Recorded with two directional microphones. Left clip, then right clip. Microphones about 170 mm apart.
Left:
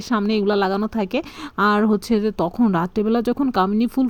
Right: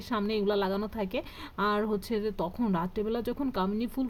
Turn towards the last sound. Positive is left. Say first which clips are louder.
# left 12 dB
turn(degrees=40)  # may be behind; listen again after turning